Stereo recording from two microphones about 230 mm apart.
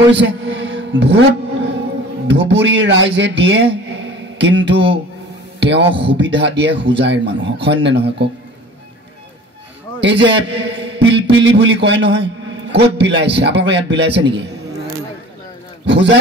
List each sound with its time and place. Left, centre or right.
0.0 s a sound: right
2.2 s a man's voice: right
9.9 s a man's voice: right
15.8 s a man's voice: right